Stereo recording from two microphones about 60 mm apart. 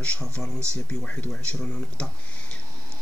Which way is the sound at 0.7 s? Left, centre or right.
Left.